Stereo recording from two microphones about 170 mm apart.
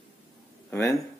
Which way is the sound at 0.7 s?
20° left (ahead or behind).